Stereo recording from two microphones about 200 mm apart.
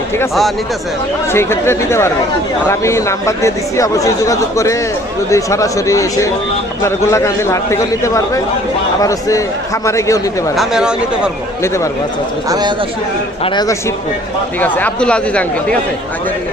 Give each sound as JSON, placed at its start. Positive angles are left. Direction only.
{"t": 1.3, "sound": "speech", "side_deg": 10}
{"t": 10.5, "sound": "speech", "side_deg": 0}
{"t": 11.6, "sound": "speech", "side_deg": 15}
{"t": 12.5, "sound": "speech", "side_deg": -20}
{"t": 13.4, "sound": "speech", "side_deg": 20}
{"t": 14.6, "sound": "speech", "side_deg": 10}